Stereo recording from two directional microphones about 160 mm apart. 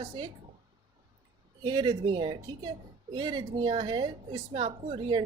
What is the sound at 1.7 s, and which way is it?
A woman's voice, 30° right (ahead or behind).